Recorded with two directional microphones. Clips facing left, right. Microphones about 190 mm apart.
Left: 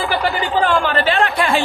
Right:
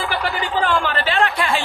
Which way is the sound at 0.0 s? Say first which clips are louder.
Left 4 dB; 35° left (ahead or behind).